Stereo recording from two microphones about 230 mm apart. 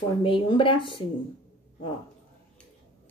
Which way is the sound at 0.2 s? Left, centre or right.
Left.